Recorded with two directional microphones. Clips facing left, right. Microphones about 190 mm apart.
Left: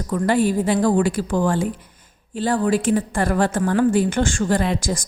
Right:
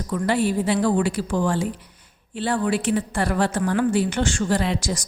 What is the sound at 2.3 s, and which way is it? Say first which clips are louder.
A woman's voice: left 3 dB; 40° left (ahead or behind).